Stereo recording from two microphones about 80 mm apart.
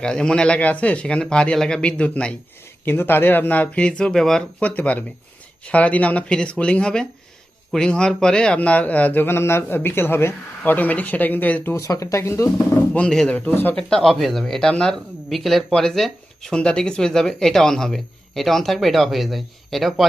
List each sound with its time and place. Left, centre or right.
0.0 s speech: centre
2.8 s a man's voice: left; by 4.4 s centre
4.6 s a man's voice: centre
11.7 s speech: left
12.9 s a man's voice: centre
13.7 s speech: centre